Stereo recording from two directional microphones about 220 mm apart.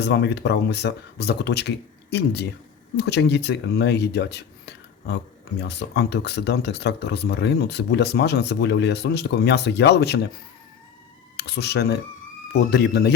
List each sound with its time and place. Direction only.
0.0 s speech: 50° left (ahead or behind)
11.3 s speech: 50° left (ahead or behind)